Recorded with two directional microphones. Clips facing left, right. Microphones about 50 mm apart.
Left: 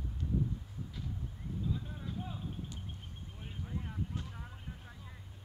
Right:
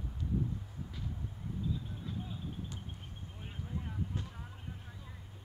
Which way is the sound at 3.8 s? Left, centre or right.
Centre.